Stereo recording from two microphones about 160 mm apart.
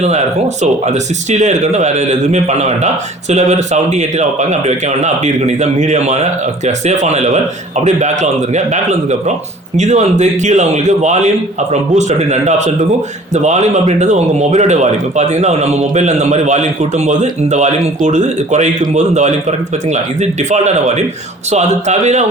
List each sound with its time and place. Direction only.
0.0 s speech: 45° right (ahead or behind)